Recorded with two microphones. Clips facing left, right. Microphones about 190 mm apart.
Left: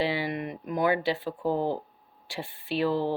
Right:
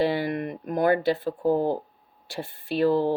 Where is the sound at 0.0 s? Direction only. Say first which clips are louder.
Right 4 dB; 50° right (ahead or behind).